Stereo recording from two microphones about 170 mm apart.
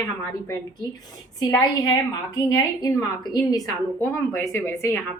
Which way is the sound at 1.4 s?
20° left (ahead or behind).